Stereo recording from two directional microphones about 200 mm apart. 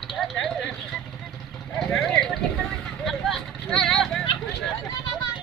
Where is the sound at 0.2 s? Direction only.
Centre (ahead or behind).